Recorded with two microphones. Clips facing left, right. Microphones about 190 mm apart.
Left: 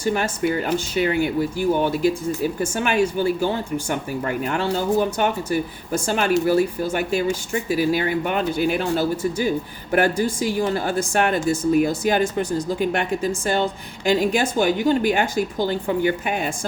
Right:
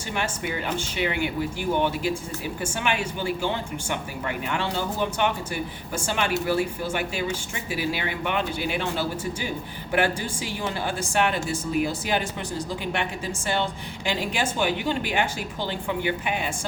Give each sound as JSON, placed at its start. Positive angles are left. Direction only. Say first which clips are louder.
{"t": 0.0, "sound": "speech", "louder": "left 8 dB", "side_deg": 40}